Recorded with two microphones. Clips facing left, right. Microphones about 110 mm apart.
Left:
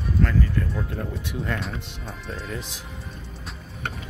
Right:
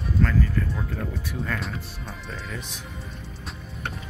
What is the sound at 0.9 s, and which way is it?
Speech, 25° left (ahead or behind).